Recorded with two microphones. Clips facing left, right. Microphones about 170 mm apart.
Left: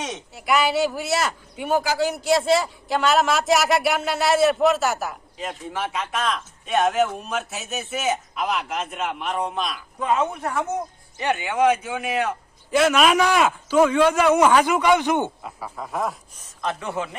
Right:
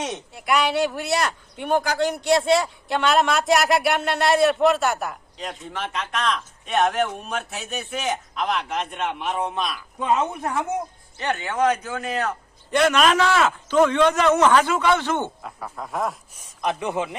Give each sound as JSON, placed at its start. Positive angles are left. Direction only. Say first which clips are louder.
{"t": 0.0, "sound": "speech", "louder": "right 1 dB", "side_deg": 0}
{"t": 11.2, "sound": "a man's voice", "louder": "left 2 dB", "side_deg": 10}
{"t": 15.4, "sound": "speech", "louder": "even", "side_deg": 0}
{"t": 16.6, "sound": "speech", "louder": "right 2 dB", "side_deg": -15}